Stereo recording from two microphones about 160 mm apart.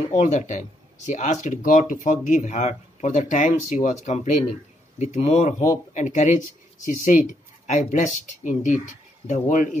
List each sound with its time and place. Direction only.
0.2 s speech: 45° left (ahead or behind)